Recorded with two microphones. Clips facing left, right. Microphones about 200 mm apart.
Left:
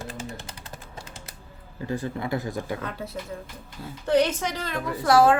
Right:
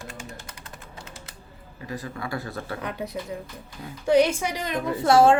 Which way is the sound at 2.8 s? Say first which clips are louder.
Right 2 dB; 15° right (ahead or behind).